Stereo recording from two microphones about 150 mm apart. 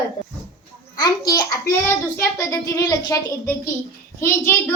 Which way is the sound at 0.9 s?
25° left (ahead or behind).